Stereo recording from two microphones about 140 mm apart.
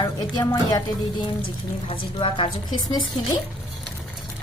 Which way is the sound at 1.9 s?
40° left (ahead or behind).